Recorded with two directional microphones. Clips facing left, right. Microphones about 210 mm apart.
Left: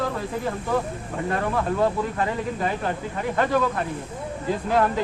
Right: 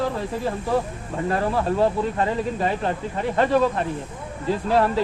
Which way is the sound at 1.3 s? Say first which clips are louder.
Right 2 dB; 30° right (ahead or behind).